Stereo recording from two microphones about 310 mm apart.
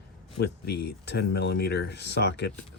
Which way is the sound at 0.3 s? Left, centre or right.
Left.